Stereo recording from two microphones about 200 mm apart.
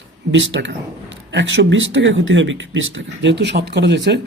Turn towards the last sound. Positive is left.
turn(degrees=-60)  # may be behind; listen again after turning